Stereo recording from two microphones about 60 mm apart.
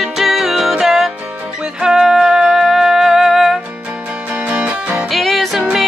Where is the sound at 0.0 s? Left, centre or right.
Centre.